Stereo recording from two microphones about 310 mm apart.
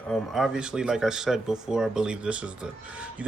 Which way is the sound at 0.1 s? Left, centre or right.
Centre.